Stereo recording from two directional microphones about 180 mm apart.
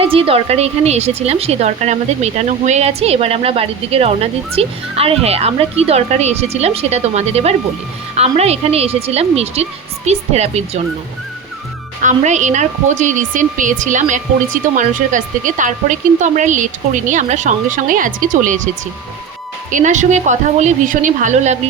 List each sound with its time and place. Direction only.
0.0 s a woman's voice: 30° right (ahead or behind)
12.0 s speech: 40° right (ahead or behind)
19.7 s speech: 45° right (ahead or behind)